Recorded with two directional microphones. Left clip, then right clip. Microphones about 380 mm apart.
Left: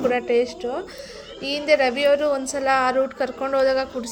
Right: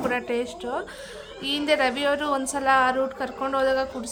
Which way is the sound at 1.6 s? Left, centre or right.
Centre.